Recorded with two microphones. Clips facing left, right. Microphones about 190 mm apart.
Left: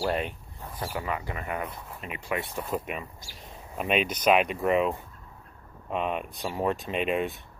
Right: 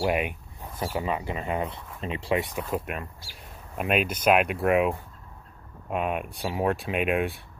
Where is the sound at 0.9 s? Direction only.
20° right (ahead or behind).